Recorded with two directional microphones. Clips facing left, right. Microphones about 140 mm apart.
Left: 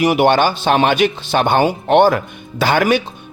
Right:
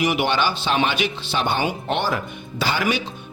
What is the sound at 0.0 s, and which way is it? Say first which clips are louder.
Speech: left 8 dB; 50° left (ahead or behind).